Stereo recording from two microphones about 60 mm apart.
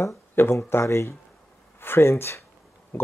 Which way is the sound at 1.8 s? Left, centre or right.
Left.